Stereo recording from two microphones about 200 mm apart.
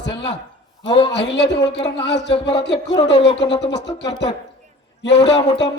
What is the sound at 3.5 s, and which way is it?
Speech, 60° left (ahead or behind).